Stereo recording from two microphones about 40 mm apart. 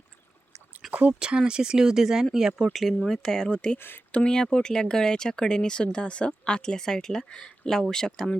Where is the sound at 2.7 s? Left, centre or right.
Centre.